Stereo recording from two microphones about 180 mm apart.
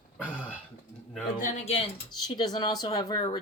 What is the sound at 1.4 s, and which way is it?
Speech, 45° left (ahead or behind).